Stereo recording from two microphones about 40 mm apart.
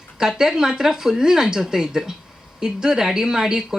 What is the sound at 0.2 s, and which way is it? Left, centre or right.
A woman's voice, centre.